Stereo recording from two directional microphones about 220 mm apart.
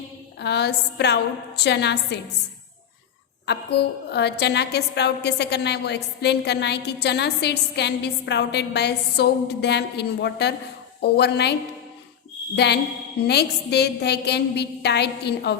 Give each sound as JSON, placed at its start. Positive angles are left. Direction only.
{"t": 0.3, "sound": "a woman's voice", "side_deg": 50}
{"t": 3.4, "sound": "a woman's voice", "side_deg": 50}
{"t": 12.5, "sound": "a woman's voice", "side_deg": 50}